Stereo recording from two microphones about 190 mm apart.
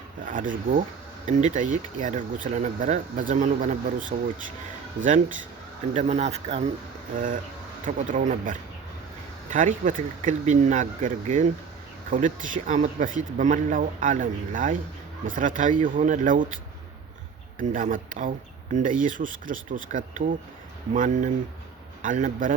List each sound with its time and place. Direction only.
0.3 s speech: 45° right (ahead or behind)
7.9 s speech: 45° right (ahead or behind)
17.6 s speech: 45° right (ahead or behind)